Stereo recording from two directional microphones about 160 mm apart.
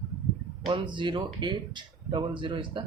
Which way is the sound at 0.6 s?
30° right (ahead or behind).